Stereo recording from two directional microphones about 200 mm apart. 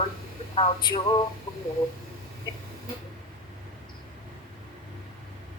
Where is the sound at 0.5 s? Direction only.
25° left (ahead or behind).